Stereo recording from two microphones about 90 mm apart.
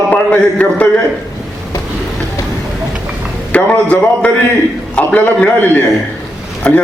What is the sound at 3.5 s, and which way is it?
A man's voice, 15° left (ahead or behind).